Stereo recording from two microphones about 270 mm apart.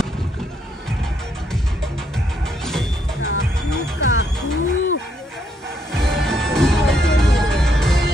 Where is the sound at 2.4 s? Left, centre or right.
Centre.